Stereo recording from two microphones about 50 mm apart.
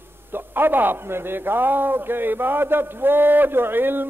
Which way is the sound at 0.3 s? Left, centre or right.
Right.